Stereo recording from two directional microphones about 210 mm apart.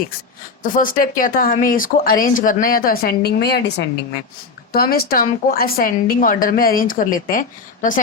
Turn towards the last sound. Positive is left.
turn(degrees=40)  # may be behind; listen again after turning